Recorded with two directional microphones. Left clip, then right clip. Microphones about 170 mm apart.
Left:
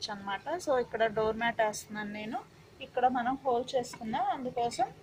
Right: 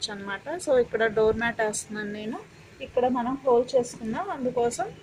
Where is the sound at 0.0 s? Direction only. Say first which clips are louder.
Right 4 dB; 15° right (ahead or behind).